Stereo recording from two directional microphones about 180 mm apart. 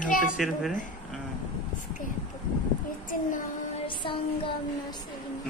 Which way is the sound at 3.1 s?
45° left (ahead or behind).